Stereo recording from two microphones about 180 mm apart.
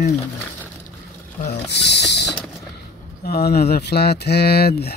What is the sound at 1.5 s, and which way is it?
Mechanisms, 70° left (ahead or behind).